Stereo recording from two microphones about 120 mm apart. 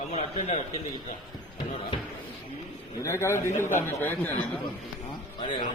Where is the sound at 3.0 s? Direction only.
25° left (ahead or behind).